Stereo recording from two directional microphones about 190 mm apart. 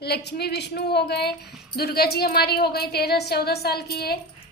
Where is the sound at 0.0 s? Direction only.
60° left (ahead or behind).